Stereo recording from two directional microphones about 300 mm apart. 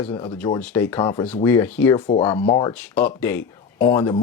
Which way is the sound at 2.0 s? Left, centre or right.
Centre.